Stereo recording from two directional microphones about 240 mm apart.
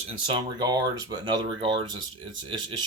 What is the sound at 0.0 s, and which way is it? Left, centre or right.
Speech, centre.